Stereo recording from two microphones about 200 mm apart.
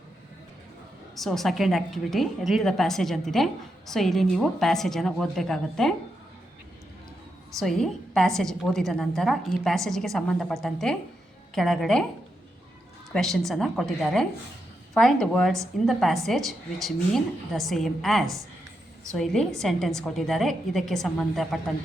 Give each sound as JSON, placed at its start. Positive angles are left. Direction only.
{"t": 1.1, "sound": "a woman's voice", "side_deg": 0}
{"t": 7.6, "sound": "a woman's voice", "side_deg": 0}
{"t": 13.1, "sound": "a woman's voice", "side_deg": 0}